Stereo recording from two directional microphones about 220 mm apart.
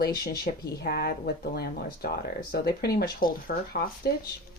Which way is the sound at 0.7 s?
45° left (ahead or behind).